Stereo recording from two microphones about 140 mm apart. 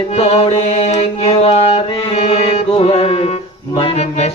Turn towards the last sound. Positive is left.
turn(degrees=50)  # may be behind; listen again after turning